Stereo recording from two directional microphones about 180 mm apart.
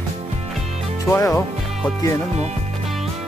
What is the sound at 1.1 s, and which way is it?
Speech, 15° left (ahead or behind).